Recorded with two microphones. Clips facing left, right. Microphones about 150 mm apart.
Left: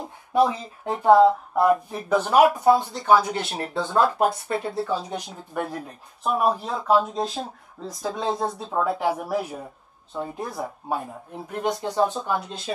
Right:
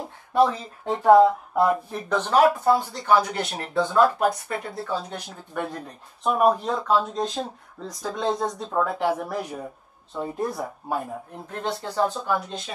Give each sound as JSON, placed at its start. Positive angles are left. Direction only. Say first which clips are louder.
{"t": 0.3, "sound": "speech", "louder": "even", "side_deg": 10}
{"t": 1.0, "sound": "speech", "louder": "even", "side_deg": 0}
{"t": 3.3, "sound": "speech", "louder": "left 1 dB", "side_deg": 30}
{"t": 5.1, "sound": "speech", "louder": "left 2 dB", "side_deg": 10}
{"t": 11.5, "sound": "speech", "louder": "left 3 dB", "side_deg": 15}